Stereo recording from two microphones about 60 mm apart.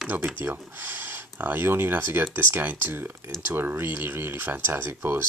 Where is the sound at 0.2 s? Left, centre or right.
Right.